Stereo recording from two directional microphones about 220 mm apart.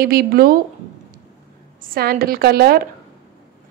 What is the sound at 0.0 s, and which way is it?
Speech, 45° right (ahead or behind).